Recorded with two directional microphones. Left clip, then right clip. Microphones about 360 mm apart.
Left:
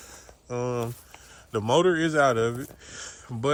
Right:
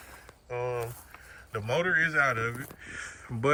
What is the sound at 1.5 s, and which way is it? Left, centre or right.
Speech, centre.